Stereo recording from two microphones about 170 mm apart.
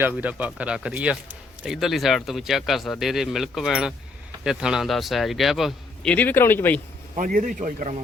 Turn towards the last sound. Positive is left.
turn(degrees=-50)  # may be behind; listen again after turning